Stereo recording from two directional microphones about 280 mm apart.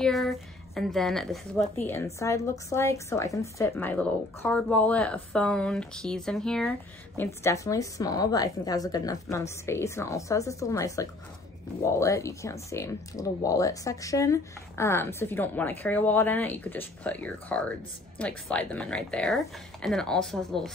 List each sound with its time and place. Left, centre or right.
0.0 s a woman's voice: centre